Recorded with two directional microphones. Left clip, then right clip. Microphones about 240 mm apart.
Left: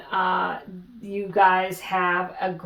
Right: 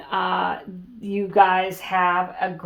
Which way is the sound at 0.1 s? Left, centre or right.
Right.